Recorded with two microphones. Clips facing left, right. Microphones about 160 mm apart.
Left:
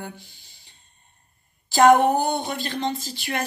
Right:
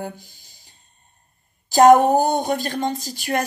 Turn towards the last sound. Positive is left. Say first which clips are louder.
# right 5 dB
turn(degrees=-45)  # may be behind; listen again after turning